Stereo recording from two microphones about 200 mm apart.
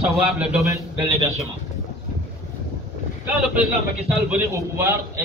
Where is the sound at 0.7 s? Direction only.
20° right (ahead or behind).